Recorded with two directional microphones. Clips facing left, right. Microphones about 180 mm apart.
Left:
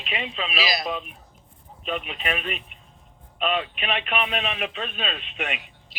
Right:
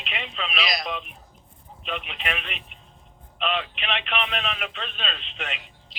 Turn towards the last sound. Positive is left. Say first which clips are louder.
# left 4 dB
turn(degrees=10)  # may be behind; listen again after turning